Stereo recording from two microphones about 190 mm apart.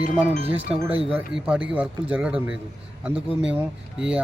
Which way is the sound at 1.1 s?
5° right (ahead or behind).